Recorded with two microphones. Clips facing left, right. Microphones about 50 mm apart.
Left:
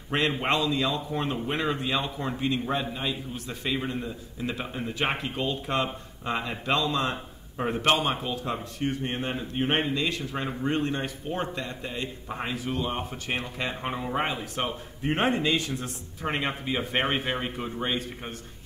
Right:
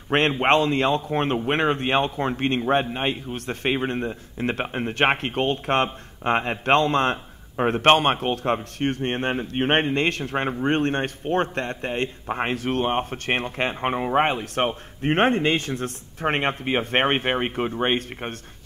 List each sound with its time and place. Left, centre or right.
0.4 s a man's voice: right